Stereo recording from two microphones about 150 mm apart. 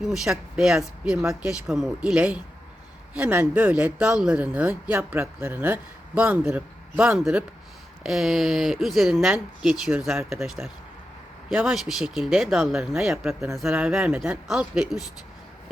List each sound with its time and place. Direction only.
0.0 s a man's voice: 5° right (ahead or behind)
10.6 s a man's voice: 15° right (ahead or behind)
11.4 s speech: centre (ahead or behind)